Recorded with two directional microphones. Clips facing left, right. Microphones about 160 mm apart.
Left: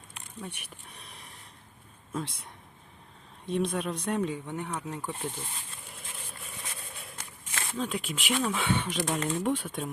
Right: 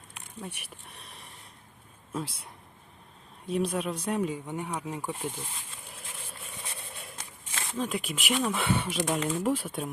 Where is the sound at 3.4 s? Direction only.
5° right (ahead or behind).